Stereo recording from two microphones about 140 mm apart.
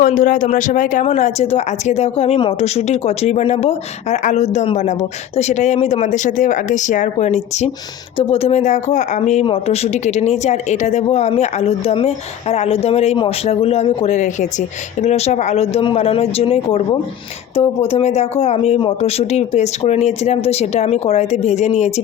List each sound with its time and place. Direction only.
0.0 s speech: 65° left (ahead or behind)